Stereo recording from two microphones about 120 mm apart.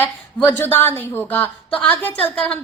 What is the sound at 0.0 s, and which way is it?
A woman's voice, 15° left (ahead or behind).